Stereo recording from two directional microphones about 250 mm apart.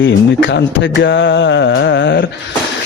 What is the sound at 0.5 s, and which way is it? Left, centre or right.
A man's voice, left.